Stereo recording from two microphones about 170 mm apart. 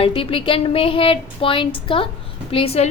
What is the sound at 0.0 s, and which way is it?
A woman's voice, 35° left (ahead or behind).